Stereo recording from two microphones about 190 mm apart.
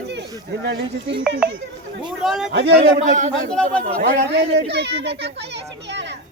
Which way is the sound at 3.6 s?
45° right (ahead or behind).